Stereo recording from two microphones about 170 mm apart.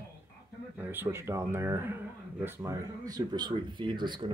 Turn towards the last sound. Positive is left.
turn(degrees=-25)  # may be behind; listen again after turning